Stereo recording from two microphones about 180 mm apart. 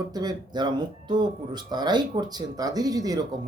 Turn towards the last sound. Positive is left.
turn(degrees=-20)  # may be behind; listen again after turning